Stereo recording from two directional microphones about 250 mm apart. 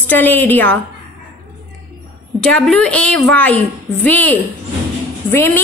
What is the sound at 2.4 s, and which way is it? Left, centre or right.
A woman's voice, centre.